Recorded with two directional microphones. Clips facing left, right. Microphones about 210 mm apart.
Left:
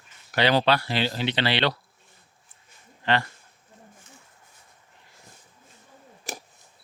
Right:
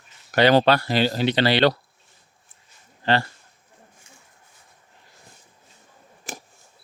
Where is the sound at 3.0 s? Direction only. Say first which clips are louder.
Right 3 dB; 35° right (ahead or behind).